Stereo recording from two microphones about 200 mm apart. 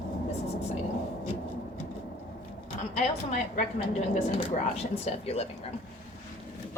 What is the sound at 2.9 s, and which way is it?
A woman's voice, 35° left (ahead or behind).